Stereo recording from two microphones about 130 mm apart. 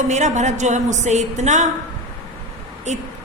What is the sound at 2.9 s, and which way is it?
Speech, 60° right (ahead or behind).